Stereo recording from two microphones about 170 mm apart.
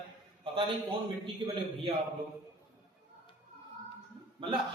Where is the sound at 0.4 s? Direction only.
30° right (ahead or behind).